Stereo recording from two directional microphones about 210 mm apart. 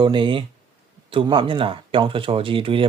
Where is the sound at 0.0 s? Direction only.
20° right (ahead or behind).